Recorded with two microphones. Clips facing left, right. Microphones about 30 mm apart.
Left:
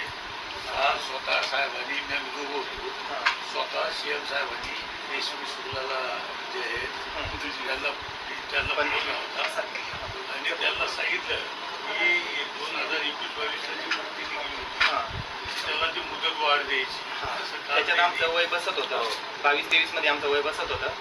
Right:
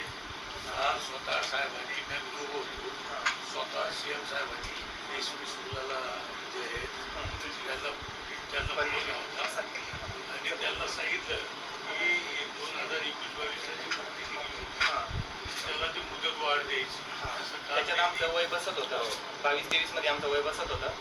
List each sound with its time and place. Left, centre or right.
0.8 s vehicle: left
3.2 s speech: left
5.9 s speech: left
8.5 s speech: left
14.8 s vehicle: left
15.6 s speech: left